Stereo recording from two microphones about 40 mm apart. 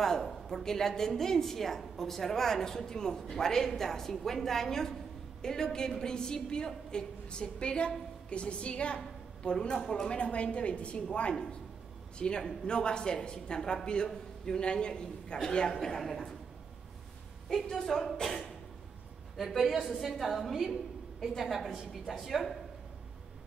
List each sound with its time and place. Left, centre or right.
0.0 s a woman's voice: centre
10.0 s a woman's voice: left
12.2 s a woman's voice: left
14.1 s a sound: centre
14.6 s a woman's voice: left; by 16.3 s centre
17.5 s a woman's voice: centre
19.4 s a woman's voice: centre